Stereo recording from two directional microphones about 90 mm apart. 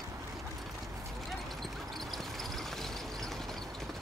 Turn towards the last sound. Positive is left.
turn(degrees=5)  # may be behind; listen again after turning